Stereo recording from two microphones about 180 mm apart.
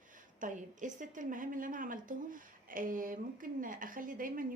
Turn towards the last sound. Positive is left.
turn(degrees=-50)  # may be behind; listen again after turning